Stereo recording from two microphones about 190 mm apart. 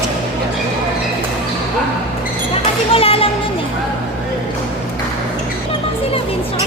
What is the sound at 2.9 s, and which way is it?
Music, 30° left (ahead or behind).